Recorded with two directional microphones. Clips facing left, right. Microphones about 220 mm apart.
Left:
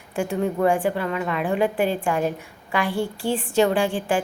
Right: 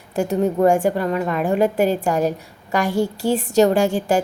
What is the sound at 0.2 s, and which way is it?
A woman's voice, 40° right (ahead or behind).